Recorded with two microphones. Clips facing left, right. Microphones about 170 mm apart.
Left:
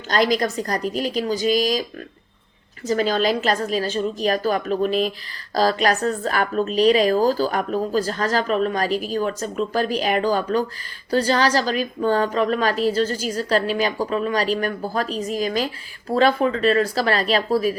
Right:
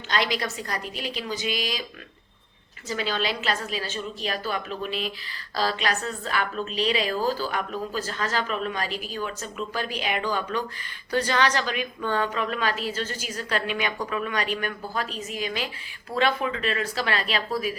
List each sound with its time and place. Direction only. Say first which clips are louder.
0.1 s a woman's voice: left 7 dB; 40° left (ahead or behind)